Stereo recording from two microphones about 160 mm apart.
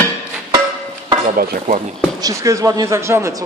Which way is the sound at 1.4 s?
55° right (ahead or behind).